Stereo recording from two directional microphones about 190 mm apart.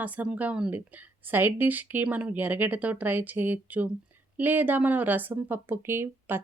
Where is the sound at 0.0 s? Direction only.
10° right (ahead or behind).